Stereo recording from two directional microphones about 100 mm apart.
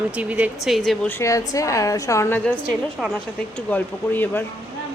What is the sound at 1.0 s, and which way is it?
Speech, 20° left (ahead or behind).